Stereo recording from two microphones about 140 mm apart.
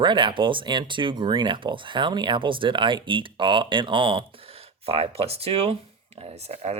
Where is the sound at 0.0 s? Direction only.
35° right (ahead or behind).